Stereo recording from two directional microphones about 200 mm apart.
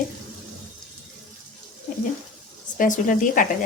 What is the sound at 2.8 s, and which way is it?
Speech, 40° left (ahead or behind).